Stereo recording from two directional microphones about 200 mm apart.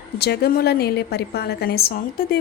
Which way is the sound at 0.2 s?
55° left (ahead or behind).